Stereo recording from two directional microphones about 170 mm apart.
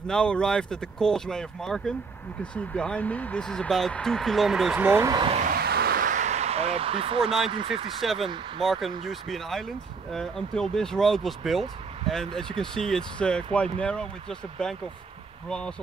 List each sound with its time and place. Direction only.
0.1 s speech: 5° left (ahead or behind)
4.8 s speech: 15° right (ahead or behind)
5.4 s a sound: 65° right (ahead or behind); by 7.3 s 35° right (ahead or behind)
7.5 s speech: 30° right (ahead or behind)
8.0 s speech: centre (ahead or behind)